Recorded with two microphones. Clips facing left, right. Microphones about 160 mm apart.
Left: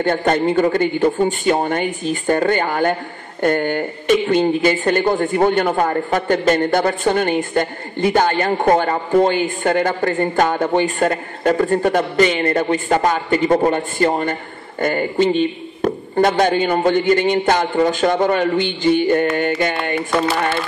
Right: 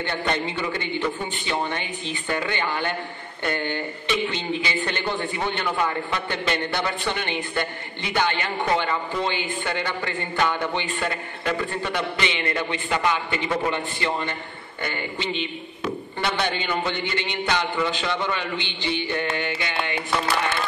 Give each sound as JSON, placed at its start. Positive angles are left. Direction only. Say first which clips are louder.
{"t": 0.0, "sound": "speech", "louder": "left 10 dB", "side_deg": 45}